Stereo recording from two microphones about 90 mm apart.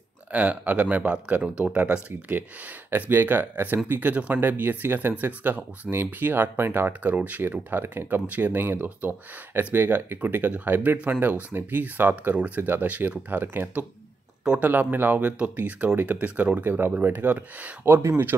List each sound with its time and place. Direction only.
0.3 s speech: 15° right (ahead or behind)
14.4 s speech: 10° right (ahead or behind)
14.7 s speech: 20° right (ahead or behind)
18.0 s speech: 30° right (ahead or behind)